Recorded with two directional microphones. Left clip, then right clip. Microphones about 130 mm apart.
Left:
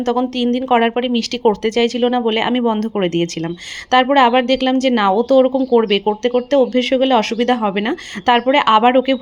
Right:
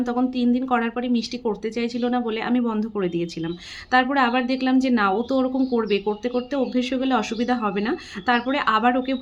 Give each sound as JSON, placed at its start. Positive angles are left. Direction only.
{"t": 0.0, "sound": "speech", "side_deg": 45}